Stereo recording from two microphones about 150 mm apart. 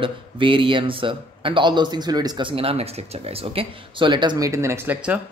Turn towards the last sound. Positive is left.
turn(degrees=-10)  # may be behind; listen again after turning